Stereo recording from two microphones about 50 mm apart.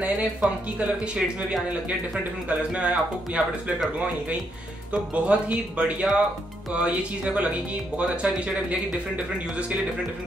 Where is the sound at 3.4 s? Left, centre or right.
Centre.